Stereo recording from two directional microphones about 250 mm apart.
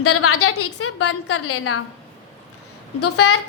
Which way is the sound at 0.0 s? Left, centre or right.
Left.